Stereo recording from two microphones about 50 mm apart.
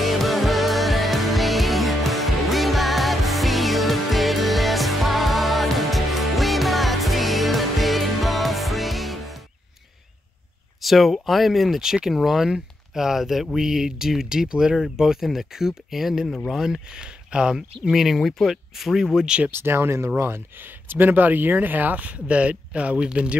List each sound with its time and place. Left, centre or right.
0.0 s music: centre
10.8 s speech: centre
17.6 s speech: centre
19.1 s speech: centre
19.6 s speech: right; by 23.3 s centre